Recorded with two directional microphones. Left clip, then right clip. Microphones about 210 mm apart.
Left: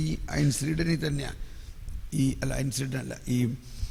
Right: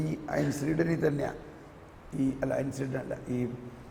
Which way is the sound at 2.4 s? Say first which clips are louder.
Right 2 dB; 40° left (ahead or behind).